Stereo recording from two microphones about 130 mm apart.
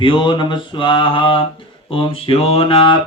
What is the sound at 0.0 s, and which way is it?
Mantra, 40° left (ahead or behind).